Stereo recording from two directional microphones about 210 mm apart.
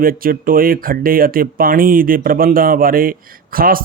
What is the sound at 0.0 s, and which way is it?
Speech, 45° right (ahead or behind).